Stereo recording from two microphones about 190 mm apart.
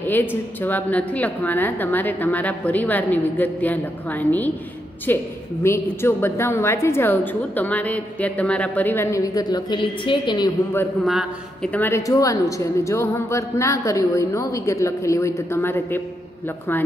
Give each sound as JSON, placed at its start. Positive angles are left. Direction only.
{"t": 0.0, "sound": "a woman's voice", "side_deg": 10}
{"t": 11.1, "sound": "a woman's voice", "side_deg": 0}